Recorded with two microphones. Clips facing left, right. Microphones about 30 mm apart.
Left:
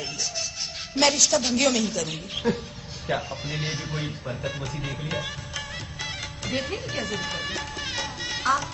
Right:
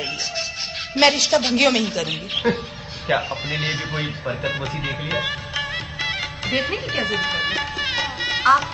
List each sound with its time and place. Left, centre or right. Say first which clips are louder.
0.9 s speech: right 5 dB; right